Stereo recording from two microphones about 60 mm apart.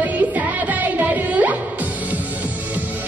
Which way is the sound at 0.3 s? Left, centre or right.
Right.